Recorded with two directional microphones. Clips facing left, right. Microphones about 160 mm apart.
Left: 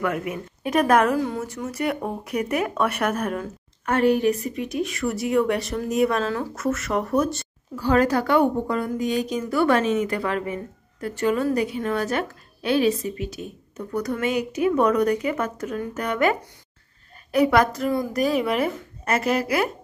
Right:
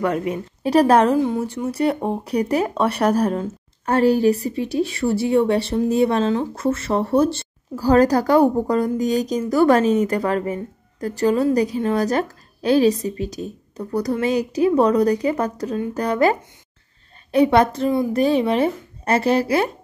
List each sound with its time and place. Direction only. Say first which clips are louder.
0.0 s speech: right 4 dB; 30° right (ahead or behind)